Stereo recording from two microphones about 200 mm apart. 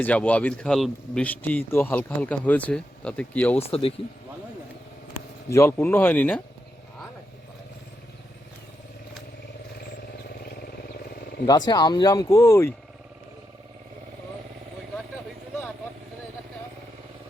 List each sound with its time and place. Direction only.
0.0 s speech: 5° left (ahead or behind)
3.6 s speech: 30° left (ahead or behind)
5.5 s speech: 15° left (ahead or behind)
11.4 s speech: 20° left (ahead or behind)